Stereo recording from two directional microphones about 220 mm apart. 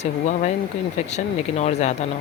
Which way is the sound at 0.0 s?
30° left (ahead or behind).